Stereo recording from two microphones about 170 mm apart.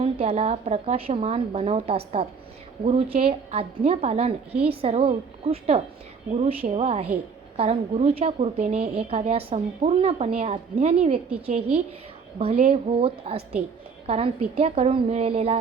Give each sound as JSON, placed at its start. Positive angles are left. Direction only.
{"t": 0.0, "sound": "a woman's voice", "side_deg": -35}